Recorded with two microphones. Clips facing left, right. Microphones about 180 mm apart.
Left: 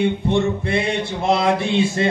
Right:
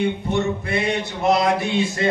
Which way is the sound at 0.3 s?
30° left (ahead or behind).